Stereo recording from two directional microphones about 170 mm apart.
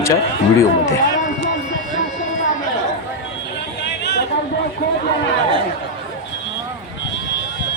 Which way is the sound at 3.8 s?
80° left.